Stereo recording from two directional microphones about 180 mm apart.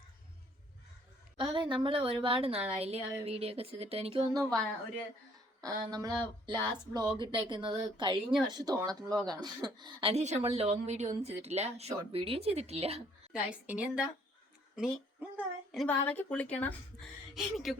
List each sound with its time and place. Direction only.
1.4 s a woman's voice: 25° right (ahead or behind)
5.6 s a woman's voice: 20° right (ahead or behind)
13.3 s a woman's voice: 5° right (ahead or behind)
15.7 s speech: centre (ahead or behind)
17.3 s speech: centre (ahead or behind)